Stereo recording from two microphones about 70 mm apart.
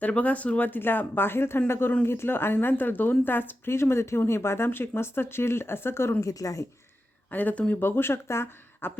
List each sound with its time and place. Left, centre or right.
0.0 s speech: left
6.2 s a woman's voice: left
7.3 s speech: left